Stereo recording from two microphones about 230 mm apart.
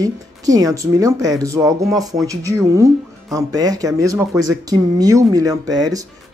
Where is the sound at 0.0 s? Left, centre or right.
Centre.